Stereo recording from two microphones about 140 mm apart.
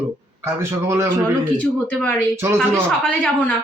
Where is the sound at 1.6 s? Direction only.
10° left (ahead or behind).